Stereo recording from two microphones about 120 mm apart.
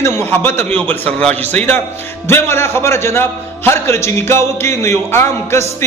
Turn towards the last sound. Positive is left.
turn(degrees=20)  # may be behind; listen again after turning